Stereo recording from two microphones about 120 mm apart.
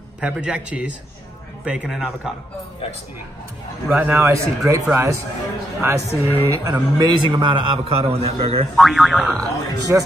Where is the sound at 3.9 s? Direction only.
15° right (ahead or behind).